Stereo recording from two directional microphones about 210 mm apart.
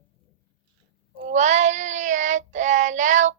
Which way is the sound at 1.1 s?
35° right (ahead or behind).